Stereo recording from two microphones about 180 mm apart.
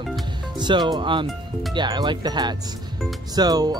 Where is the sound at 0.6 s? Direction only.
25° right (ahead or behind).